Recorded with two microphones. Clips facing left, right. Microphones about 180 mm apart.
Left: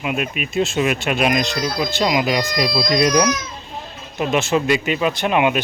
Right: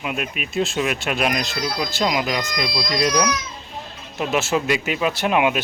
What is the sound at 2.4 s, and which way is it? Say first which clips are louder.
Speech: left 5 dB; 40° left (ahead or behind).